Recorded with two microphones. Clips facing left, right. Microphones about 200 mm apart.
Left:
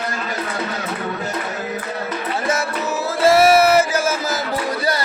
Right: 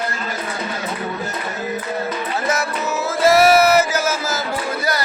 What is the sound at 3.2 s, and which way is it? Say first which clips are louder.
Chant: even; 30° left (ahead or behind).